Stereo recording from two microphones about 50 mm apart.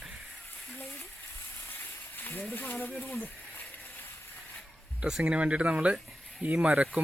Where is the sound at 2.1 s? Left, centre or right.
Left.